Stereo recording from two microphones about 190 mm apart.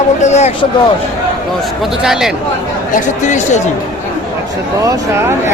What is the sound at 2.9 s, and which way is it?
Speech, 40° left (ahead or behind).